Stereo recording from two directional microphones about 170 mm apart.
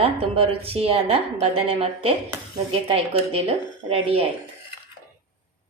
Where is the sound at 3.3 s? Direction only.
35° right (ahead or behind).